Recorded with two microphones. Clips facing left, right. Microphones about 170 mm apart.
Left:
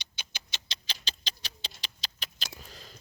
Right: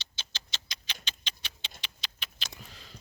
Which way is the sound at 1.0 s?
35° left (ahead or behind).